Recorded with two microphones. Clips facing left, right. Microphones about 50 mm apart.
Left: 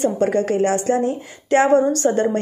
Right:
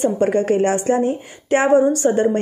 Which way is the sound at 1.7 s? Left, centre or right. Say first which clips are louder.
Right 1 dB; centre.